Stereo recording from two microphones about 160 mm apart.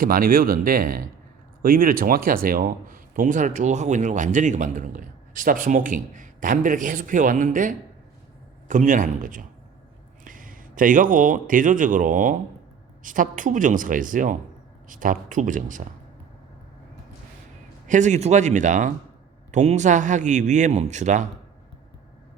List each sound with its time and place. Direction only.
0.0 s a man's voice: 65° right (ahead or behind)
17.8 s a man's voice: 50° right (ahead or behind)